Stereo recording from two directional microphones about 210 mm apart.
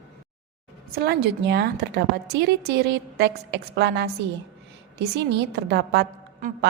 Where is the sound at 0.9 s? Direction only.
50° right (ahead or behind).